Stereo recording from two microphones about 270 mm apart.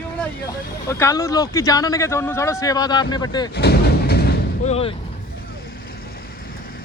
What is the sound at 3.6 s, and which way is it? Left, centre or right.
Artillery fire, left.